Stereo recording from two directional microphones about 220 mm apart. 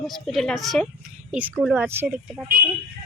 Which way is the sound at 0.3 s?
Centre (ahead or behind).